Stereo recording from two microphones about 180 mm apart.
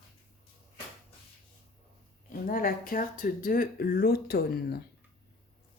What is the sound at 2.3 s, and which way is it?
Speech, 50° left (ahead or behind).